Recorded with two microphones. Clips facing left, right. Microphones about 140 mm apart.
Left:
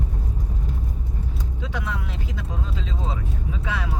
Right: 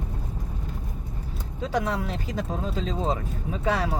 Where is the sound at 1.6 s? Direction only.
40° right (ahead or behind).